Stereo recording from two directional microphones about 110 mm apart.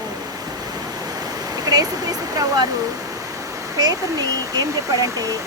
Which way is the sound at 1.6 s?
35° right (ahead or behind).